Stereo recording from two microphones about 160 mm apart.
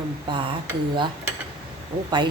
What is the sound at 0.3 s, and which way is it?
Speech, 30° right (ahead or behind).